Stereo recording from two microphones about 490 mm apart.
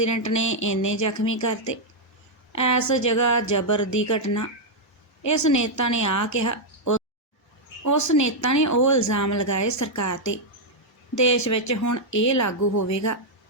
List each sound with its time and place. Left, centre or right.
0.0 s speech: left